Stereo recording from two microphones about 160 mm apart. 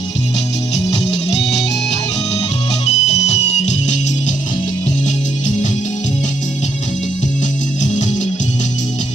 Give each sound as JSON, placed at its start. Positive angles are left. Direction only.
{"t": 2.8, "sound": "music", "side_deg": 45}
{"t": 7.9, "sound": "music", "side_deg": 50}